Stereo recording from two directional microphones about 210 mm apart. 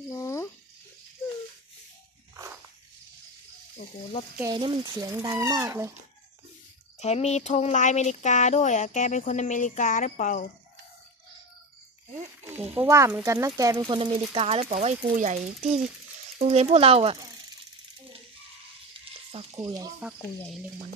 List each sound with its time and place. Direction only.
0.1 s a sound: 15° left (ahead or behind)
2.3 s walk: 15° right (ahead or behind)
4.4 s speech: 20° right (ahead or behind)
7.0 s speech: 30° left (ahead or behind)
12.7 s speech: 15° right (ahead or behind); by 15.3 s 35° right (ahead or behind)
15.6 s speech: centre (ahead or behind)
16.3 s speech: 30° right (ahead or behind)
19.0 s sizzle: 30° right (ahead or behind)
20.0 s speech: 5° right (ahead or behind)